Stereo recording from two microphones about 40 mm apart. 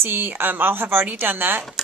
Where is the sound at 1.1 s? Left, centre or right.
Right.